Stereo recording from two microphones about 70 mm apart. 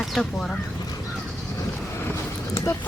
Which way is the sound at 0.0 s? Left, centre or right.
Centre.